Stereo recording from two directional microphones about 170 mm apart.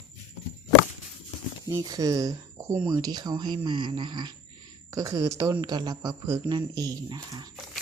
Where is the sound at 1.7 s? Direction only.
20° right (ahead or behind).